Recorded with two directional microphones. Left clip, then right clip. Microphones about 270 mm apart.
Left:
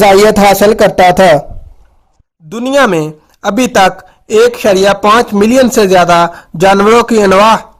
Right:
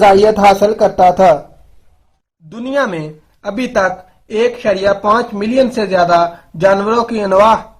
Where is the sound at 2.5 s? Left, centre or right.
Left.